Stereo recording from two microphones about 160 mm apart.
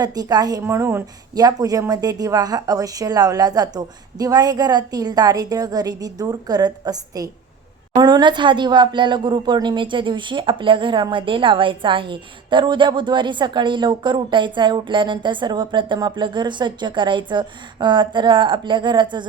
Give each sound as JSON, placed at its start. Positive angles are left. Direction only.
{"t": 0.0, "sound": "speech", "side_deg": -25}